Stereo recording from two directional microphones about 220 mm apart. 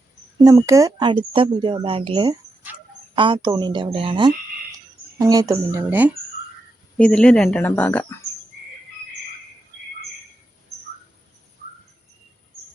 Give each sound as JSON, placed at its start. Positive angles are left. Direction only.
{"t": 0.4, "sound": "speech", "side_deg": -15}
{"t": 6.9, "sound": "a woman's voice", "side_deg": 5}